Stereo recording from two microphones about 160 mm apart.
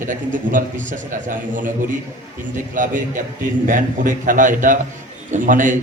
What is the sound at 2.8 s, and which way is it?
A man's voice, 55° right (ahead or behind).